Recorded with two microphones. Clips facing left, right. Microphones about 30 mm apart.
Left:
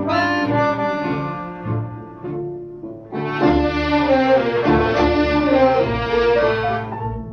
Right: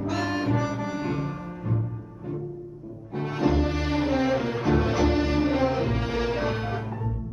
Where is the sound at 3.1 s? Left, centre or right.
Left.